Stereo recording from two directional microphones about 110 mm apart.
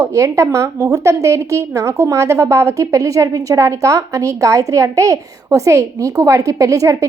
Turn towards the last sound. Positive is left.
turn(degrees=-30)  # may be behind; listen again after turning